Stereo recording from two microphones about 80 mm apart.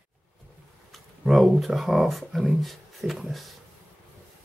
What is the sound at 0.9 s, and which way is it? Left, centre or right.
Speech, centre.